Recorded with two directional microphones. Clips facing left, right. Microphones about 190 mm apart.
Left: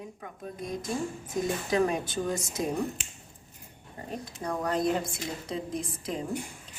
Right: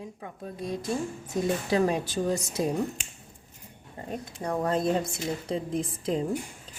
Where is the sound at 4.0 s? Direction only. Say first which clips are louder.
Right 3 dB; 30° right (ahead or behind).